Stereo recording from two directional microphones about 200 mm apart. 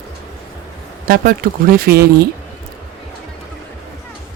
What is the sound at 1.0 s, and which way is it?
Speech, 45° right (ahead or behind).